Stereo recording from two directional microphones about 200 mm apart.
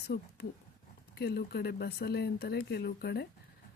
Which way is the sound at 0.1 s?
55° left (ahead or behind).